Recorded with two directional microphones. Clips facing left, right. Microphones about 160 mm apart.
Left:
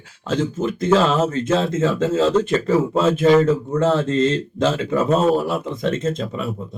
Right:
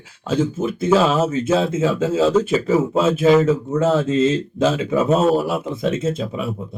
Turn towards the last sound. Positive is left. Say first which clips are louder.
# right 1 dB
turn(degrees=-5)  # may be behind; listen again after turning